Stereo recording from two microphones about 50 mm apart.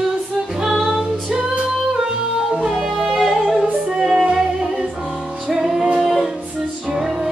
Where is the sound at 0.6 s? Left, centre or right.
Centre.